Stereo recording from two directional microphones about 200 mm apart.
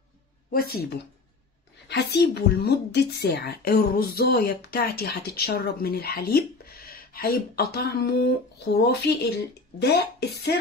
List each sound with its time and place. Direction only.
0.5 s speech: 50° left (ahead or behind)